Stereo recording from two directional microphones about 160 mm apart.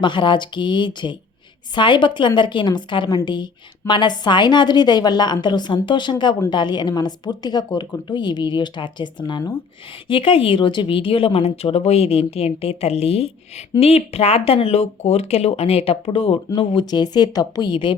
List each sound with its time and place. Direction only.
0.0 s a woman's voice: 30° left (ahead or behind)